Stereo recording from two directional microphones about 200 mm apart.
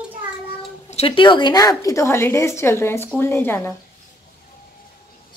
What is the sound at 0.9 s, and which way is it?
A woman's voice, 25° left (ahead or behind).